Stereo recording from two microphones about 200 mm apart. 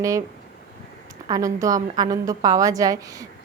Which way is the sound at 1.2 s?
15° right (ahead or behind).